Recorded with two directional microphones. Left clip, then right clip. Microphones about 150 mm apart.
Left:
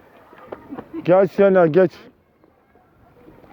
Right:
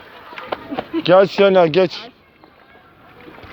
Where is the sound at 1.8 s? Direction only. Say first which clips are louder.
Even; 50° left (ahead or behind).